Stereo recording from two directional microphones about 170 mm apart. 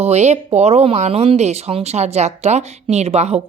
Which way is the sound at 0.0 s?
40° right (ahead or behind).